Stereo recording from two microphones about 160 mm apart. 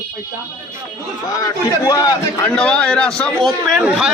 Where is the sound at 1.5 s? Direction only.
25° left (ahead or behind).